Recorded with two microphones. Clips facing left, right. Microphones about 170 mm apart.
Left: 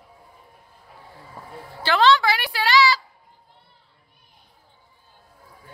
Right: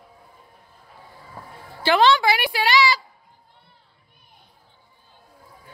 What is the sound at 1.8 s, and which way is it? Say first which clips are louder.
A woman's voice: right 1 dB; 15° right (ahead or behind).